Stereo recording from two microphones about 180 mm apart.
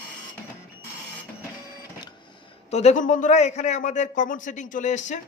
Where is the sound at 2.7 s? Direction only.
40° left (ahead or behind).